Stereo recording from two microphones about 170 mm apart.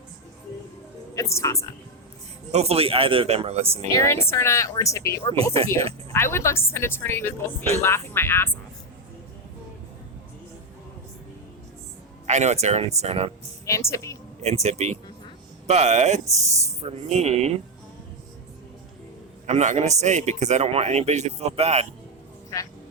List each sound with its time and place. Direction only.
1.1 s speech: 15° left (ahead or behind)
2.5 s a man's voice: 35° right (ahead or behind)
3.9 s speech: 15° left (ahead or behind)
5.5 s a man's voice: 35° right (ahead or behind)
6.1 s speech: 15° left (ahead or behind)
12.3 s a man's voice: 40° right (ahead or behind)
13.7 s speech: 15° left (ahead or behind)
14.4 s a man's voice: 40° right (ahead or behind)
19.5 s a man's voice: 45° right (ahead or behind)